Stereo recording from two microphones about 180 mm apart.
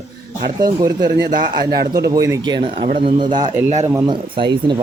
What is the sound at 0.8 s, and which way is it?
Speech, 20° right (ahead or behind).